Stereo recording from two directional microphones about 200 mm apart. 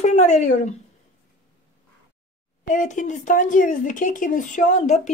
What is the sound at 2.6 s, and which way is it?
Speech, 40° left (ahead or behind).